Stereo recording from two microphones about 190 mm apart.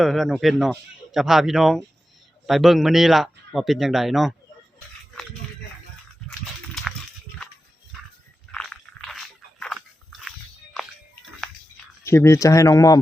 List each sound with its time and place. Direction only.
0.0 s speech: centre (ahead or behind)
8.5 s biting: 5° left (ahead or behind)
10.8 s music: centre (ahead or behind)
12.0 s speech: 15° left (ahead or behind)